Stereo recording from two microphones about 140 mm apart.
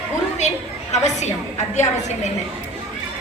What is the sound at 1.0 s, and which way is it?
A child's voice, 55° left (ahead or behind).